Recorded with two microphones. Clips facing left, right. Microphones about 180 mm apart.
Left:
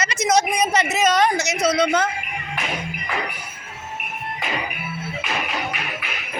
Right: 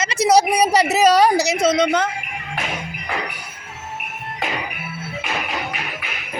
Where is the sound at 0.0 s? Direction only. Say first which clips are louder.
Right 4 dB; 30° right (ahead or behind).